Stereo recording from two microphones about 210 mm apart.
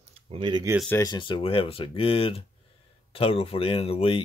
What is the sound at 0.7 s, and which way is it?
Speech, 10° left (ahead or behind).